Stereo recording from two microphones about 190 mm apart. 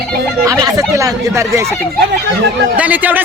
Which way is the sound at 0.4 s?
15° right (ahead or behind).